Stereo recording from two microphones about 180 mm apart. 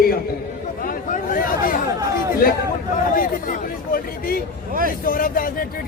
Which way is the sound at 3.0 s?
50° left (ahead or behind).